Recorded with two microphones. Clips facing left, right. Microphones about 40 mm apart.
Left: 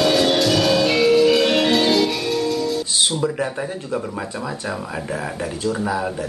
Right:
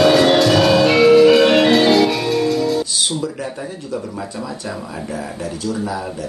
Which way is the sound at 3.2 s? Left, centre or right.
Left.